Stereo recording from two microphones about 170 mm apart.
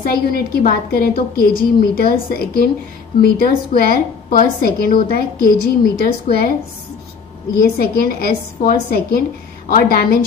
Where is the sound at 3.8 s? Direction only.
60° left (ahead or behind).